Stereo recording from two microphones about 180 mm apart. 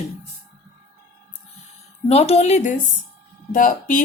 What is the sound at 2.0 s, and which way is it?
Speech, 35° left (ahead or behind).